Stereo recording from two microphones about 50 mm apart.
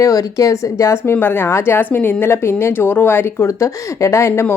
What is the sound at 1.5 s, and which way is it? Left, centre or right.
Speech, left.